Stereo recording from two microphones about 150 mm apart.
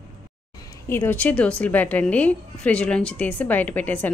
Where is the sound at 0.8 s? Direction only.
15° left (ahead or behind).